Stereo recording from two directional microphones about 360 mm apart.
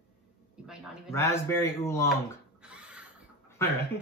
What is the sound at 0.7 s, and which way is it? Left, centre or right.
Speech, centre.